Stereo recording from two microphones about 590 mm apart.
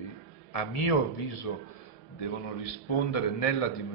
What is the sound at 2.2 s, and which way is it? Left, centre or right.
A man's voice, left.